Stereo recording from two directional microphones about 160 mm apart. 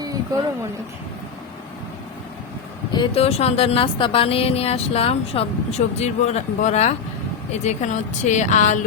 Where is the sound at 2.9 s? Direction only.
35° left (ahead or behind).